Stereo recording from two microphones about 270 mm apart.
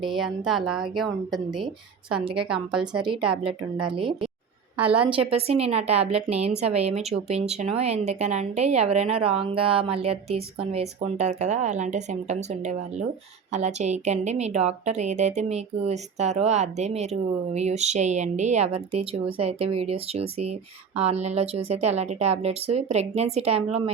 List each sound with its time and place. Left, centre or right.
0.0 s a woman's voice: centre
3.0 s speech: centre
4.8 s a woman's voice: centre
5.0 s speech: centre